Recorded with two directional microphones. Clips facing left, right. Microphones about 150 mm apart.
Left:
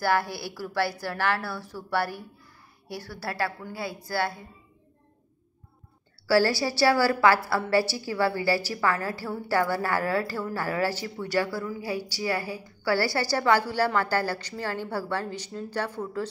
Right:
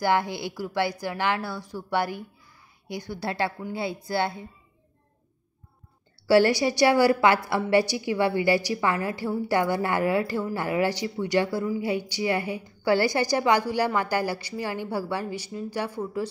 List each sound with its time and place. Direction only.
0.0 s a woman's voice: 20° right (ahead or behind)
6.2 s a woman's voice: 20° right (ahead or behind)